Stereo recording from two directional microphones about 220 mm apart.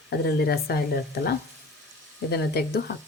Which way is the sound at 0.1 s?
45° left (ahead or behind).